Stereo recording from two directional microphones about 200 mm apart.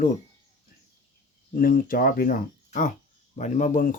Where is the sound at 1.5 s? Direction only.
45° left (ahead or behind).